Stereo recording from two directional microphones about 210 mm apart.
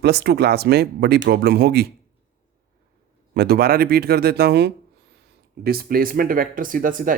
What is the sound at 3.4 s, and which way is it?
Speech, 50° right (ahead or behind).